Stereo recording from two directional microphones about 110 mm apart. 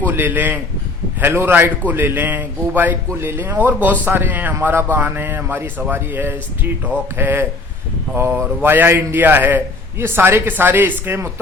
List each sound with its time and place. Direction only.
0.1 s speech: 15° right (ahead or behind)